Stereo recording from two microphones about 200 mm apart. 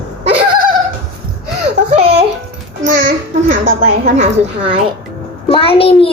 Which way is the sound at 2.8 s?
45° right (ahead or behind).